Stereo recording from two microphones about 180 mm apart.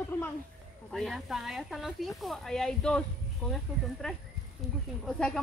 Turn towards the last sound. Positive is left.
turn(degrees=5)  # may be behind; listen again after turning